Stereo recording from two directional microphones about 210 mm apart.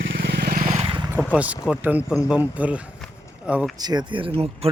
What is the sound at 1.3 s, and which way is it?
Speech, 5° right (ahead or behind).